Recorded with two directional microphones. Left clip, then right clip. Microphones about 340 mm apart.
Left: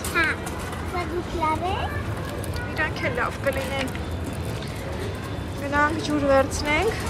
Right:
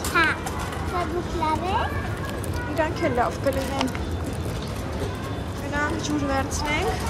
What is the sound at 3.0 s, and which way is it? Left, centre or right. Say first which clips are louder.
Speech: right 2 dB; centre.